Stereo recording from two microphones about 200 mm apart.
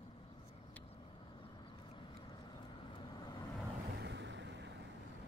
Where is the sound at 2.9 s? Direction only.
20° left (ahead or behind).